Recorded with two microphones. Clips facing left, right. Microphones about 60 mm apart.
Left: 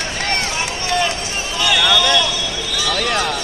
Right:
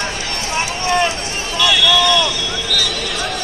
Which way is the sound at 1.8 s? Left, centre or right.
Left.